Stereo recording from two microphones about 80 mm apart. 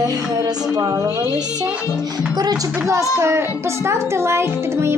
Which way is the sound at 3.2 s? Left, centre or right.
Right.